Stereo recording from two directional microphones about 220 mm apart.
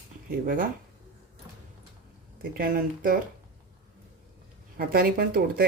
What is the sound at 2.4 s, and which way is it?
Speech, 40° right (ahead or behind).